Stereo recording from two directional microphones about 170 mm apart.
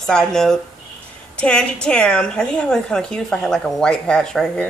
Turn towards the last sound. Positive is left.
turn(degrees=5)  # may be behind; listen again after turning